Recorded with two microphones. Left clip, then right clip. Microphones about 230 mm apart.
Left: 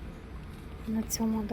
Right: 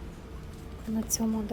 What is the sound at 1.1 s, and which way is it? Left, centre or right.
Speech, centre.